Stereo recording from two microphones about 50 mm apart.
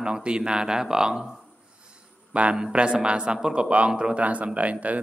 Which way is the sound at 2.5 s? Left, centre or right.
Centre.